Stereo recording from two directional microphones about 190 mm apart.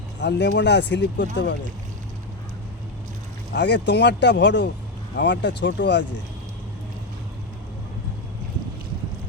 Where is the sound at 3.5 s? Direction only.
65° left (ahead or behind).